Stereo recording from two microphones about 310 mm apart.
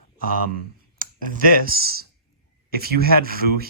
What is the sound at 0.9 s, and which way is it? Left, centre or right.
Speech, right.